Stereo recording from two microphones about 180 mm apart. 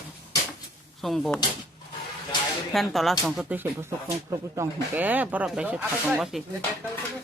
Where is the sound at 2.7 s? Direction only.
Centre (ahead or behind).